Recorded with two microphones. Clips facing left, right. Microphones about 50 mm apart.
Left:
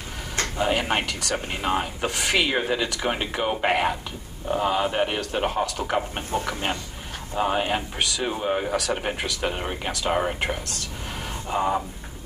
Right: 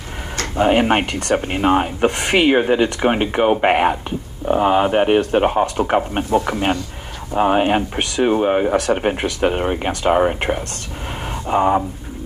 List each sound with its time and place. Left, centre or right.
0.6 s speech: right